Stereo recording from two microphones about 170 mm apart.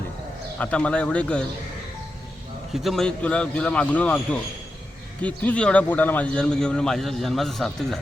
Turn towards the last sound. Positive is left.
turn(degrees=0)  # may be behind; listen again after turning